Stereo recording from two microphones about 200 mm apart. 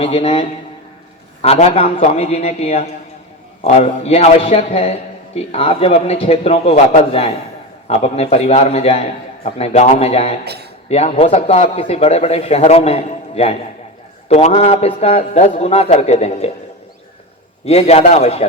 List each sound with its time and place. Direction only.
0.0 s a man's voice: 30° left (ahead or behind)
10.4 s speech: 55° right (ahead or behind)
10.8 s a man's voice: 30° left (ahead or behind)
17.7 s a man's voice: 30° left (ahead or behind)